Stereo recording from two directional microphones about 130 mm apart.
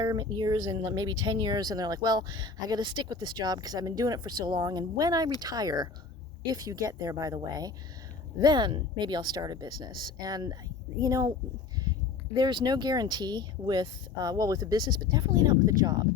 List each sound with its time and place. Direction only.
0.0 s speech: 30° right (ahead or behind)